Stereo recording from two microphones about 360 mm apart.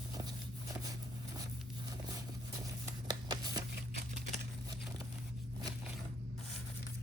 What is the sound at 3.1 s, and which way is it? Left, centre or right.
Shuffling cards, centre.